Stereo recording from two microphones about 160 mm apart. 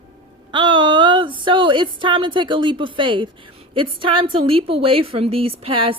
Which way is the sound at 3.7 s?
30° right (ahead or behind).